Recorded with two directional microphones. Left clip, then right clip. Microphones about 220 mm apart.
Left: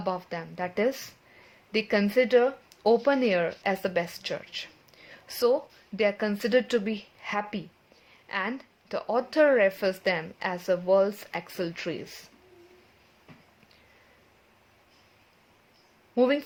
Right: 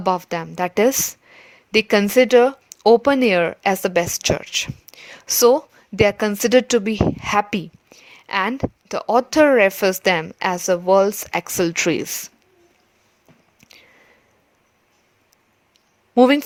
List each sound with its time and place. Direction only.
0.0 s a woman's voice: 45° right (ahead or behind)
16.1 s a woman's voice: 45° right (ahead or behind)